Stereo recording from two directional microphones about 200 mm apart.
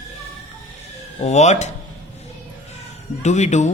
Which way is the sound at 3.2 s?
35° left (ahead or behind).